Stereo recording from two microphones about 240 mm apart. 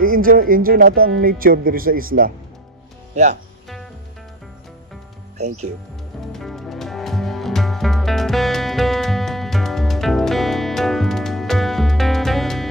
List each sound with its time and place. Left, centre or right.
0.0 s speech: right
6.3 s music: centre